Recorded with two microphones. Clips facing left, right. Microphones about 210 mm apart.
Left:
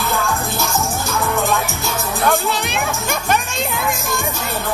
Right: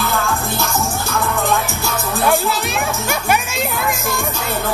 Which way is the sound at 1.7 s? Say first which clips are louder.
Right 1 dB; 15° left (ahead or behind).